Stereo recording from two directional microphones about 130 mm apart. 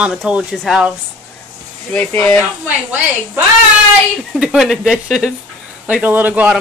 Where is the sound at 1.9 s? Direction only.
10° left (ahead or behind).